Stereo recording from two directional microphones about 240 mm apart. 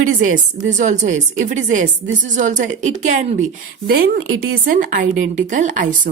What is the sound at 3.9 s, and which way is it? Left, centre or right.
A woman's voice, right.